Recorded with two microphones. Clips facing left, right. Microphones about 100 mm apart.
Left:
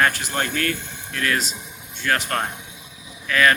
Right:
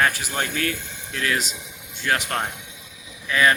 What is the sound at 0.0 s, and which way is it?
Speech, 5° right (ahead or behind).